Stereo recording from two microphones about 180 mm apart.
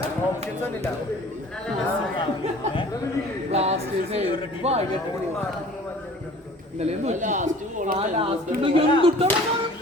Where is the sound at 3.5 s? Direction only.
35° right (ahead or behind).